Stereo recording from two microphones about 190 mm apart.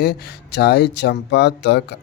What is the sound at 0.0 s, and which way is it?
Speech, 60° left (ahead or behind).